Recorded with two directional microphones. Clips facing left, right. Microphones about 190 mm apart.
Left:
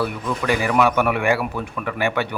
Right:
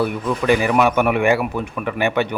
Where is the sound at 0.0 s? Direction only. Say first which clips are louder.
Right 4 dB; 20° right (ahead or behind).